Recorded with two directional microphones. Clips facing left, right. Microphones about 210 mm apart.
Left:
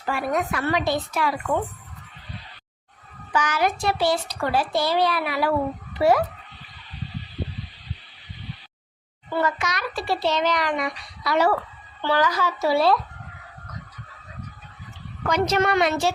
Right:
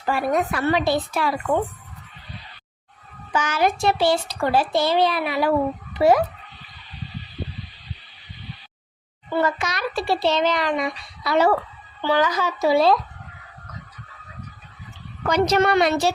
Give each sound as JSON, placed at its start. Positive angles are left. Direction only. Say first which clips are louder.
{"t": 0.0, "sound": "a woman's voice", "louder": "right 3 dB", "side_deg": -30}
{"t": 3.3, "sound": "a child's voice", "louder": "right 2 dB", "side_deg": -25}
{"t": 9.4, "sound": "a child's voice", "louder": "right 2 dB", "side_deg": -30}
{"t": 15.3, "sound": "a woman's voice", "louder": "right 3 dB", "side_deg": -35}